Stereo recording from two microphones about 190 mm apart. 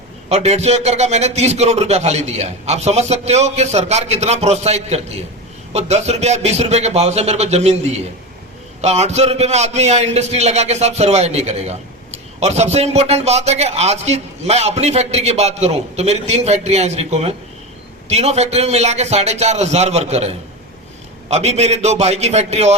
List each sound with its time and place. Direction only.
0.3 s a man's voice: 35° right (ahead or behind)